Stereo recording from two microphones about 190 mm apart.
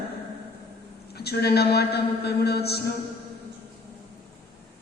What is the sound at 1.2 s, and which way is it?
A man's voice, 55° left (ahead or behind).